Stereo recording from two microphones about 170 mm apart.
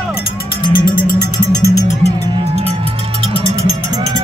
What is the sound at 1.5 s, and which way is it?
Music, 20° left (ahead or behind).